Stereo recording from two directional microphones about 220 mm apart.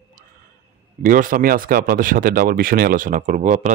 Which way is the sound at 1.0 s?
40° right (ahead or behind).